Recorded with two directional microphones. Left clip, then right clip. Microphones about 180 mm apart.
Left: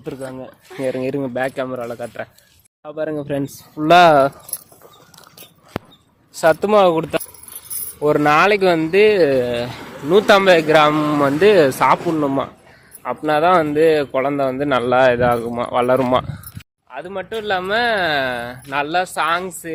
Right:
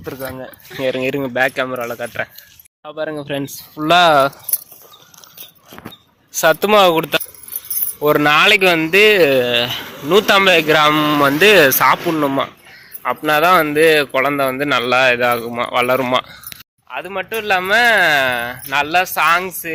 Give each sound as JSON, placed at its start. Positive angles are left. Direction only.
{"t": 0.0, "sound": "speech", "side_deg": -5}
{"t": 6.3, "sound": "speech", "side_deg": 0}
{"t": 16.9, "sound": "speech", "side_deg": -10}